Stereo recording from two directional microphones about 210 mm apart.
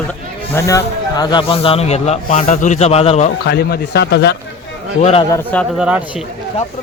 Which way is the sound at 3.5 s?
50° left (ahead or behind).